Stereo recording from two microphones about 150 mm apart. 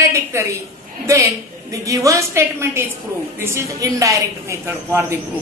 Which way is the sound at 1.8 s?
20° right (ahead or behind).